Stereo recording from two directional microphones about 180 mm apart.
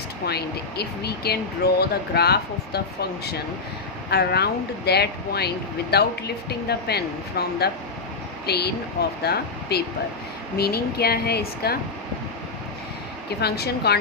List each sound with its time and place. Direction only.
0.3 s speech: 65° left (ahead or behind)
13.4 s speech: 65° left (ahead or behind)